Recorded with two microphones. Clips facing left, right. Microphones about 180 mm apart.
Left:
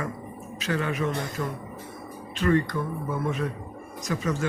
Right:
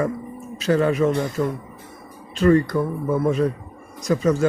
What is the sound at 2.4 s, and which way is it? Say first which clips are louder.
Speech: right 7 dB; 35° right (ahead or behind).